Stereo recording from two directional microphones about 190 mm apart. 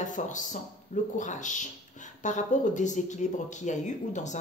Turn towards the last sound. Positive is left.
turn(degrees=40)  # may be behind; listen again after turning